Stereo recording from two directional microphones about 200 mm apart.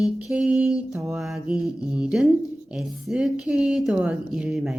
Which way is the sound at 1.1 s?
Centre (ahead or behind).